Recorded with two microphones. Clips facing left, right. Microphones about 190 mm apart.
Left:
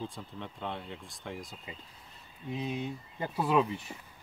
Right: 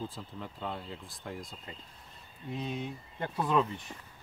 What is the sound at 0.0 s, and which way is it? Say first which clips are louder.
Speech: even; centre (ahead or behind).